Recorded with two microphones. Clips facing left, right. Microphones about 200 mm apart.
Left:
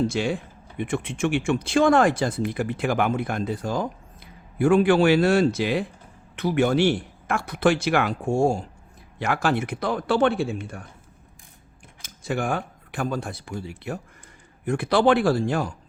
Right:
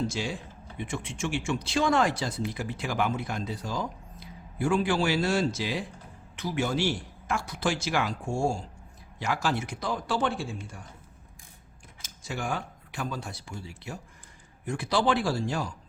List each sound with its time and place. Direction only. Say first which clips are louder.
0.1 s speech: left 8 dB; 60° left (ahead or behind)
12.0 s speech: left 7 dB; 55° left (ahead or behind)